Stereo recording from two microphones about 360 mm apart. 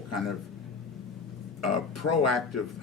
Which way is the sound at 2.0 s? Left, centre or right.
Left.